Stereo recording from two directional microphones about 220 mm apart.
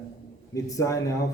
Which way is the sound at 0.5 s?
15° left (ahead or behind).